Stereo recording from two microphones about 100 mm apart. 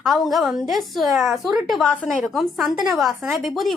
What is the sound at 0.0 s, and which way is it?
A woman's voice, centre (ahead or behind).